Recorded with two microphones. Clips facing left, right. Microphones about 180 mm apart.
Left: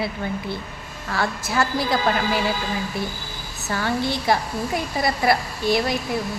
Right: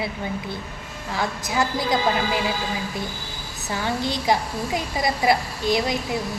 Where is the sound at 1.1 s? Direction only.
20° right (ahead or behind).